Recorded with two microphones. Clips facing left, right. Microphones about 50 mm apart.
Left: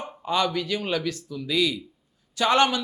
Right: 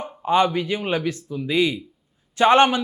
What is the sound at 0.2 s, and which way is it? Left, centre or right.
Speech, right.